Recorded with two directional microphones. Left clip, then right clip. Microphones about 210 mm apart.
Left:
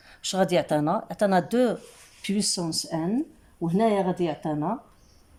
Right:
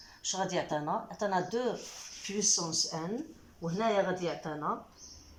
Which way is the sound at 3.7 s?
20° left (ahead or behind).